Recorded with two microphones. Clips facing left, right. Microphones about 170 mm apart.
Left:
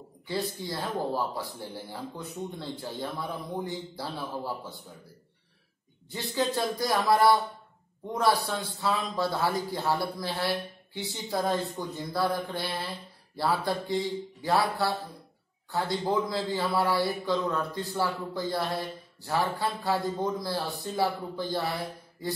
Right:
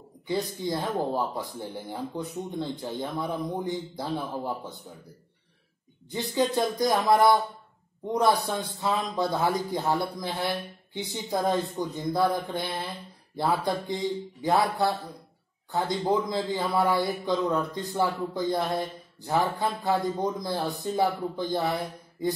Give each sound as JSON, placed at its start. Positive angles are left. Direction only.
{"t": 0.3, "sound": "a man's voice", "side_deg": -20}
{"t": 6.8, "sound": "a man's voice", "side_deg": -20}